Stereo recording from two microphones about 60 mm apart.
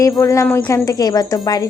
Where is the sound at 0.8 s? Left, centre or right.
Left.